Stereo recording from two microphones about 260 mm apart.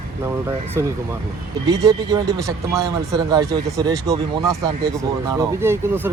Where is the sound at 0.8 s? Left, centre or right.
Centre.